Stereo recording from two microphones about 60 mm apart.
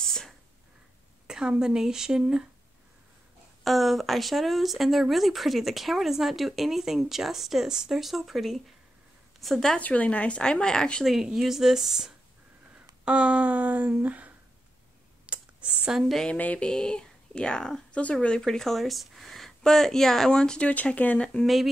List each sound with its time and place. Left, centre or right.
0.0 s a sound: centre
1.2 s speech: centre
3.6 s speech: centre
9.8 s speech: left
11.2 s speech: centre
13.0 s a sound: centre
15.2 s computer keyboard: right
16.0 s speech: centre
16.3 s speech: left
16.6 s speech: centre
18.4 s speech: centre
20.7 s speech: left